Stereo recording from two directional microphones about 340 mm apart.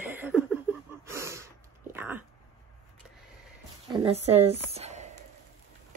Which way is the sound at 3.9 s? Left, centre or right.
Centre.